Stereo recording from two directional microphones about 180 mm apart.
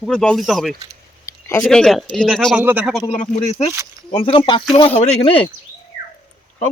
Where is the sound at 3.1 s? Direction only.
35° left (ahead or behind).